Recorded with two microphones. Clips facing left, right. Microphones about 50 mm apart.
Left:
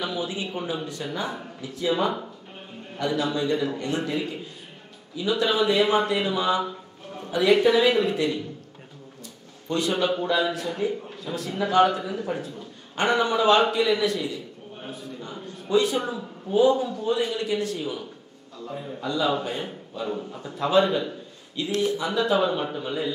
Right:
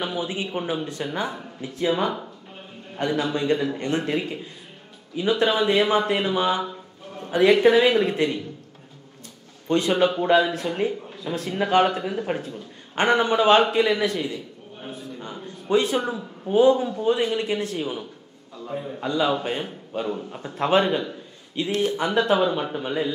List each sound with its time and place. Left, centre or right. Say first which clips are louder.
0.0 s a man's voice: right 2 dB; right
9.7 s a man's voice: right 4 dB; right
18.6 s a man's voice: right 3 dB; centre
18.9 s a man's voice: right 2 dB; right